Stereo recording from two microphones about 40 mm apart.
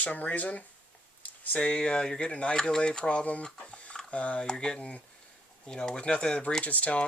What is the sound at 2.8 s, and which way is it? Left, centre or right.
Speech, left.